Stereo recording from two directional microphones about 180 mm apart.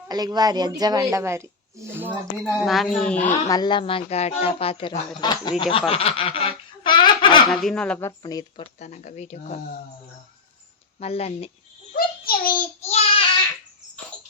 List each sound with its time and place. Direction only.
0.1 s speech: 20° right (ahead or behind)
2.4 s a woman's voice: centre (ahead or behind)
3.4 s speech: 20° left (ahead or behind)
7.5 s a woman's voice: centre (ahead or behind)
7.9 s speech: 15° left (ahead or behind)
8.8 s speech: 40° left (ahead or behind)
11.0 s speech: 35° left (ahead or behind)
11.9 s child singing: 55° left (ahead or behind)
12.8 s child singing: 35° left (ahead or behind)